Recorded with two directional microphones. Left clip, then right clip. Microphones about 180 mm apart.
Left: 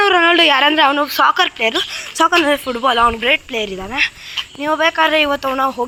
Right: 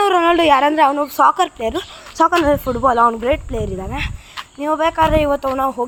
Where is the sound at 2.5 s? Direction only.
15° right (ahead or behind).